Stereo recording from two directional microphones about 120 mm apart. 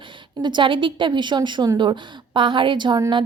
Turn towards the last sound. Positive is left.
turn(degrees=-40)  # may be behind; listen again after turning